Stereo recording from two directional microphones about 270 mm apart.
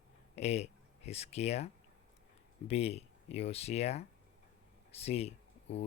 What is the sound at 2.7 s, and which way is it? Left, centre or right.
Speech, left.